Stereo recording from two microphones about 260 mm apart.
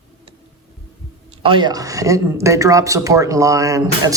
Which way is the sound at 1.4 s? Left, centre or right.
Centre.